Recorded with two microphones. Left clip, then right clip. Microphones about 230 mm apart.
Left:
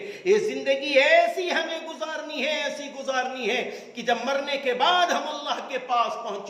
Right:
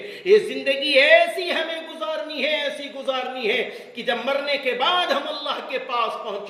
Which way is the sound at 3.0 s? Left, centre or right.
Centre.